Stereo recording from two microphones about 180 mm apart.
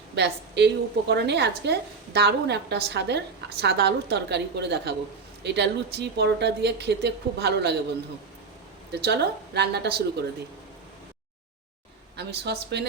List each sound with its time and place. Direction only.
0.2 s a woman's voice: 70° right (ahead or behind)
8.9 s a woman's voice: 65° right (ahead or behind)
12.1 s a woman's voice: 70° right (ahead or behind)